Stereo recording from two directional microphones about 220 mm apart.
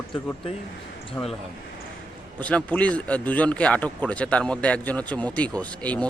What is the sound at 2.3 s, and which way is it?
A man's voice, 5° left (ahead or behind).